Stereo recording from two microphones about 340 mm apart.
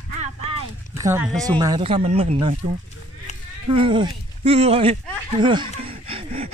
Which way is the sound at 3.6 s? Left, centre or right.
Centre.